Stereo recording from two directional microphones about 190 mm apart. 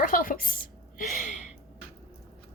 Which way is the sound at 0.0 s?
45° left (ahead or behind).